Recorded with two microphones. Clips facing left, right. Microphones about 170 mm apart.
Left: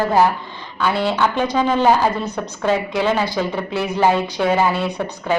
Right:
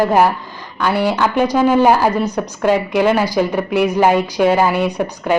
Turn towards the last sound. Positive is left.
turn(degrees=-15)  # may be behind; listen again after turning